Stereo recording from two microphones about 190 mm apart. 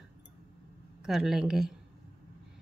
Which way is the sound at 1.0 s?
Centre (ahead or behind).